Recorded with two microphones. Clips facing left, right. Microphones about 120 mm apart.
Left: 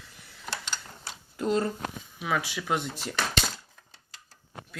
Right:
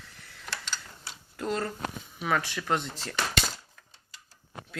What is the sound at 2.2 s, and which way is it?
Speech, 10° left (ahead or behind).